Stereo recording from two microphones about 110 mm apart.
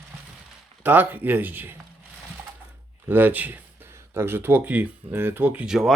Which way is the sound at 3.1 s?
15° right (ahead or behind).